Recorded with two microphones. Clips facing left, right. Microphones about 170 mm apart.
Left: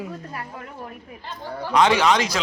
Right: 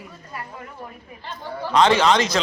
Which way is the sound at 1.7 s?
15° left (ahead or behind).